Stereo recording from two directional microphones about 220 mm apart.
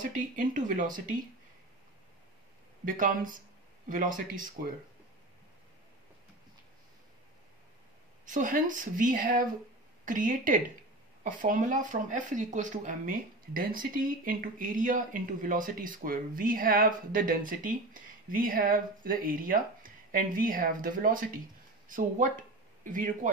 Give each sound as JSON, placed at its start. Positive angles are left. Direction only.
{"t": 0.0, "sound": "speech", "side_deg": -35}
{"t": 2.8, "sound": "speech", "side_deg": -35}
{"t": 8.3, "sound": "speech", "side_deg": -35}